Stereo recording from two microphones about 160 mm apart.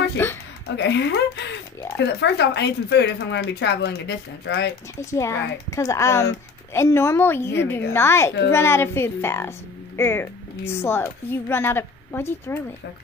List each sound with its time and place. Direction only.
0.2 s speech: 15° left (ahead or behind)
0.7 s speech: 90° left
5.1 s a woman's voice: 20° left (ahead or behind)